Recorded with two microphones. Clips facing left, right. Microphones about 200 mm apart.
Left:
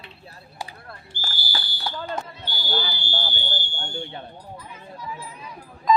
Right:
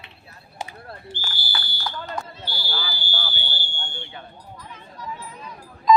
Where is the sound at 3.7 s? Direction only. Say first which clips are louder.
Left 5 dB; 40° left (ahead or behind).